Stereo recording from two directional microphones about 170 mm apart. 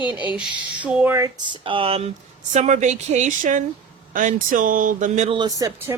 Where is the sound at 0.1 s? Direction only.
10° right (ahead or behind).